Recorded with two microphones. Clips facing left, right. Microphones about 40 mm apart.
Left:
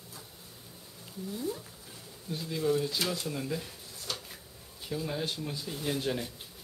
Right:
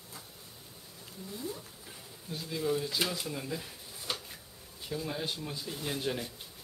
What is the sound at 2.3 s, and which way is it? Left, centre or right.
Speech, centre.